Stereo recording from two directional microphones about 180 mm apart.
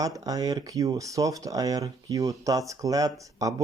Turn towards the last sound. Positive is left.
turn(degrees=-20)  # may be behind; listen again after turning